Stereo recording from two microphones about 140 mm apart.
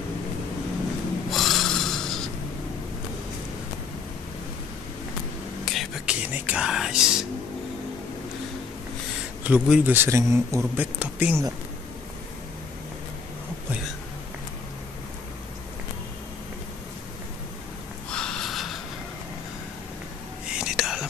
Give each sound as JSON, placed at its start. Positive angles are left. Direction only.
{"t": 1.3, "sound": "snort", "side_deg": 0}
{"t": 5.7, "sound": "a sound", "side_deg": -5}
{"t": 9.4, "sound": "a man's voice", "side_deg": -10}
{"t": 10.0, "sound": "speech", "side_deg": -20}
{"t": 11.0, "sound": "a man's voice", "side_deg": -10}
{"t": 18.1, "sound": "snort", "side_deg": 5}
{"t": 20.5, "sound": "whispering", "side_deg": -5}